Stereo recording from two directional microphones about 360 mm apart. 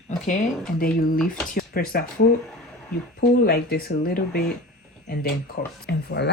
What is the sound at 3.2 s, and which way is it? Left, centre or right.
Speech, left.